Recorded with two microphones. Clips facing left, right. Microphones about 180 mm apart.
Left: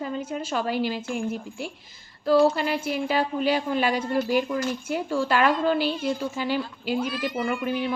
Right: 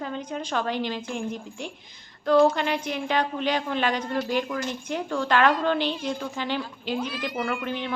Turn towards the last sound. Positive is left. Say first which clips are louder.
# left 3 dB
turn(degrees=10)  # may be behind; listen again after turning